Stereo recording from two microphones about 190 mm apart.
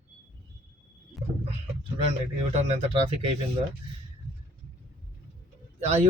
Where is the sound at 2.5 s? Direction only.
35° right (ahead or behind).